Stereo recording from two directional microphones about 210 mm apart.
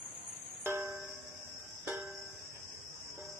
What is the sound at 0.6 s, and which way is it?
Music, 10° right (ahead or behind).